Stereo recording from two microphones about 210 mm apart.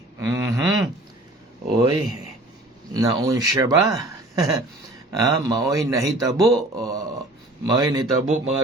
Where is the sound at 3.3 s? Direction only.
15° right (ahead or behind).